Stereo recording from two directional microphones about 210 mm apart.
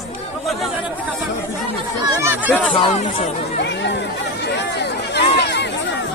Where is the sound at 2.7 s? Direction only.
25° left (ahead or behind).